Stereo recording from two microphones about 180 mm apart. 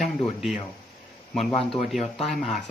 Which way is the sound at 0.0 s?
Centre (ahead or behind).